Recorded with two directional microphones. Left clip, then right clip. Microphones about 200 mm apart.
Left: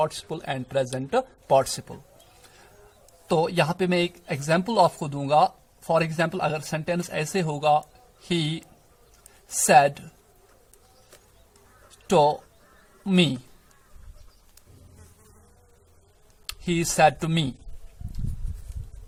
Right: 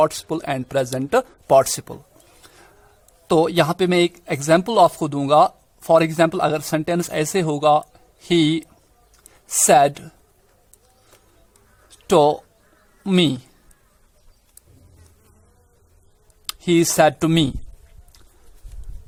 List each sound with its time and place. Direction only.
0.0 s speech: 45° right (ahead or behind)
3.2 s speech: 40° right (ahead or behind)
12.0 s speech: 40° right (ahead or behind)
16.5 s speech: 40° right (ahead or behind)